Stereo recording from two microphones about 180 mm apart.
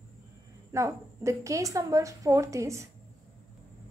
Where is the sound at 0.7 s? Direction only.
15° right (ahead or behind).